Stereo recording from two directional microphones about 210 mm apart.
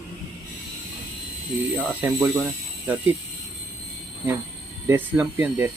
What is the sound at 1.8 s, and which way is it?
Speech, 10° right (ahead or behind).